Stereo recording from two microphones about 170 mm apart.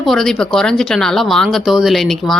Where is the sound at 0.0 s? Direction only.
Centre (ahead or behind).